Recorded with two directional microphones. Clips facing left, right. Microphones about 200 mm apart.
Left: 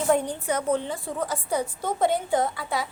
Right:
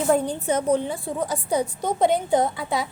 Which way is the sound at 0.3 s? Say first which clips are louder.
Right 4 dB; 20° right (ahead or behind).